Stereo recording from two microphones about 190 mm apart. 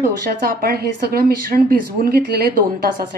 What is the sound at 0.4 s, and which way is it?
A woman's voice, 55° right (ahead or behind).